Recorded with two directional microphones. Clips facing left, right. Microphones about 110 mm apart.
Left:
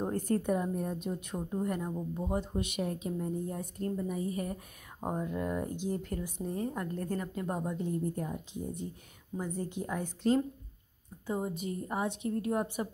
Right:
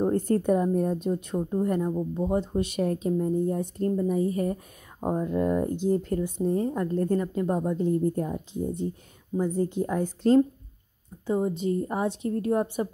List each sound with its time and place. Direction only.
0.1 s a woman's voice: 30° right (ahead or behind)
11.2 s a woman's voice: 25° right (ahead or behind)